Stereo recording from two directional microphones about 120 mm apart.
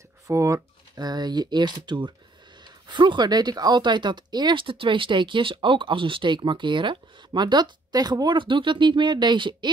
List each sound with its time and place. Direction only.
0.3 s speech: 25° right (ahead or behind)